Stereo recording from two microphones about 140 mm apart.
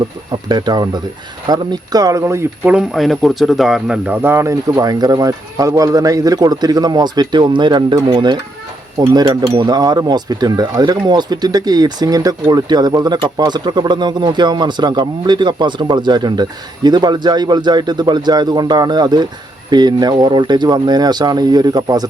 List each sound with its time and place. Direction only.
0.3 s speech: 30° right (ahead or behind)
2.7 s speech: centre (ahead or behind); by 22.0 s 30° right (ahead or behind)